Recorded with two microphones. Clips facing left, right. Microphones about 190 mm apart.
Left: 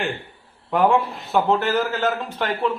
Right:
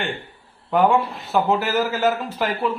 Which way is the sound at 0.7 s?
Centre (ahead or behind).